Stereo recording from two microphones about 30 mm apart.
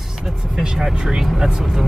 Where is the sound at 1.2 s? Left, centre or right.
Centre.